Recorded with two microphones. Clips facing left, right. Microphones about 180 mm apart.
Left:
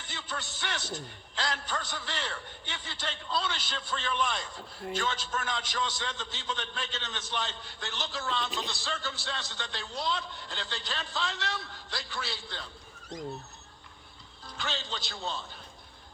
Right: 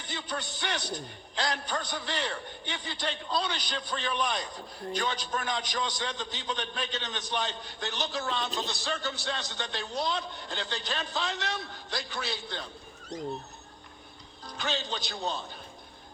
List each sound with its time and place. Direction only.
0.1 s a man's voice: 20° right (ahead or behind)
14.6 s a man's voice: 15° right (ahead or behind)